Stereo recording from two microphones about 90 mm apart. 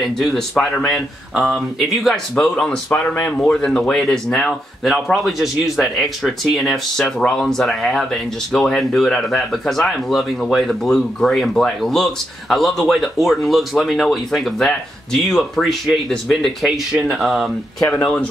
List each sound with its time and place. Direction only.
0.0 s speech: 5° left (ahead or behind)
2.9 s speech: 20° left (ahead or behind); by 17.5 s 5° right (ahead or behind)